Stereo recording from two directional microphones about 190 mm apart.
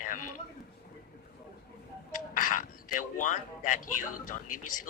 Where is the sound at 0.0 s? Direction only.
45° left (ahead or behind).